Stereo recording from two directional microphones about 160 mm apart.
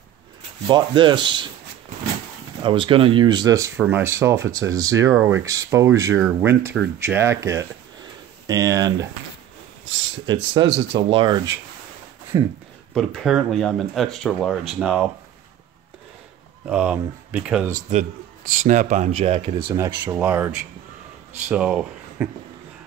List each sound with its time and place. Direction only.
0.7 s speech: 30° right (ahead or behind)
2.6 s speech: 30° right (ahead or behind)
10.2 s speech: 30° right (ahead or behind)
12.9 s speech: centre (ahead or behind)
16.6 s speech: 5° right (ahead or behind)
17.6 s speech: 50° right (ahead or behind)
19.7 s speech: 20° right (ahead or behind)